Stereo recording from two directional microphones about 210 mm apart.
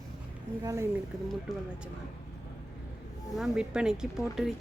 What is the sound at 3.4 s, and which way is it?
Speech, 5° right (ahead or behind).